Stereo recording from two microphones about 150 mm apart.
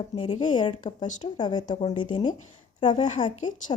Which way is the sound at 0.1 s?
30° left (ahead or behind).